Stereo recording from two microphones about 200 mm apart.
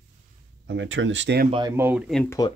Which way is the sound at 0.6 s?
65° right (ahead or behind).